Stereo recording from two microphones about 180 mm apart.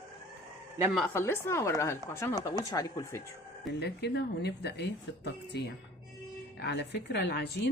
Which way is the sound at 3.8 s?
65° left (ahead or behind).